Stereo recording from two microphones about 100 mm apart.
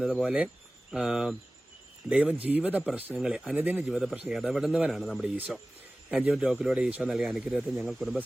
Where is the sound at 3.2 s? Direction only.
5° right (ahead or behind).